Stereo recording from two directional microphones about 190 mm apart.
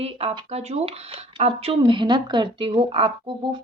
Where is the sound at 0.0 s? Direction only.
30° right (ahead or behind).